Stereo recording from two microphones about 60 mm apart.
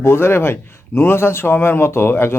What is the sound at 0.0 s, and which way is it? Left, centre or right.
Speech, left.